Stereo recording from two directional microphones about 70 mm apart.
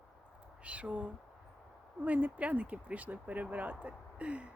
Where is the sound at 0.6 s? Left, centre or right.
Centre.